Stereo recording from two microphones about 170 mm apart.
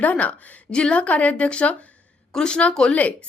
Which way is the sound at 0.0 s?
10° left (ahead or behind).